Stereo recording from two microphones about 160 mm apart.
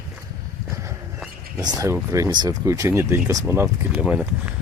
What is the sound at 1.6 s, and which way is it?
Speech, 20° right (ahead or behind).